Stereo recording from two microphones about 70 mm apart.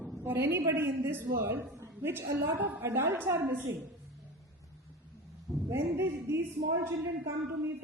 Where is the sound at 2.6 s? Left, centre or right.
Right.